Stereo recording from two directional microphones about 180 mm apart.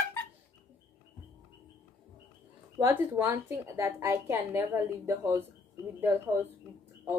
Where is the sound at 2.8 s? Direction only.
15° right (ahead or behind).